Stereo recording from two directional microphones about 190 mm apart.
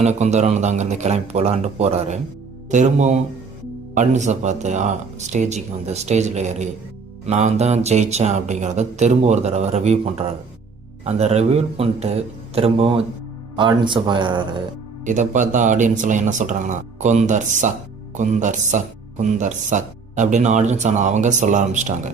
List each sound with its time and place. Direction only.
0.0 s speech: 35° right (ahead or behind)
15.0 s speech: 40° right (ahead or behind)